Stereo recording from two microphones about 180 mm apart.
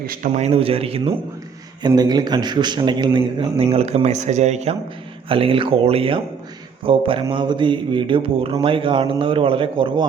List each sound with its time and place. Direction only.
0.0 s a man's voice: 55° right (ahead or behind)
0.3 s speech: 35° right (ahead or behind)